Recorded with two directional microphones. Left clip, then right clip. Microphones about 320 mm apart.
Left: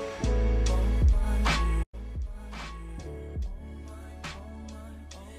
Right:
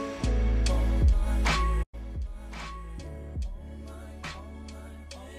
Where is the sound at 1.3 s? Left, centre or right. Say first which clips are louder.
Right 1 dB; centre.